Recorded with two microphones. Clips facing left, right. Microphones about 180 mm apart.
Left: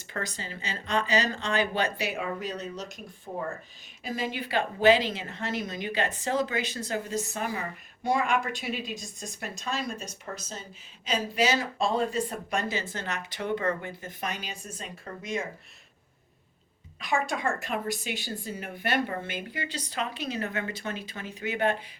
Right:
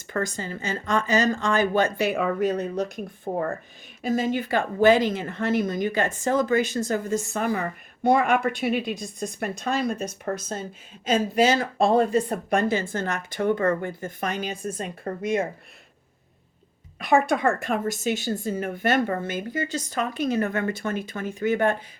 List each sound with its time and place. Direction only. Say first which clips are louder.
0.1 s speech: right 8 dB; 50° right (ahead or behind)
17.0 s speech: right 8 dB; 60° right (ahead or behind)